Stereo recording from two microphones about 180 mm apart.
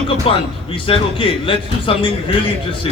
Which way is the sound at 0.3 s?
30° left (ahead or behind).